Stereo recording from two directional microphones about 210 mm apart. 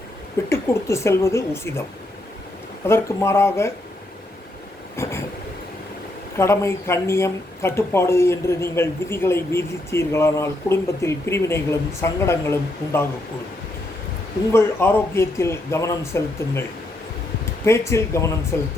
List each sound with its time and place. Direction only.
0.5 s speech: 15° left (ahead or behind)
2.8 s speech: 10° left (ahead or behind)
5.0 s a sound: 10° left (ahead or behind)
6.3 s speech: 15° left (ahead or behind)
14.5 s speech: 10° left (ahead or behind)
17.7 s speech: 15° left (ahead or behind)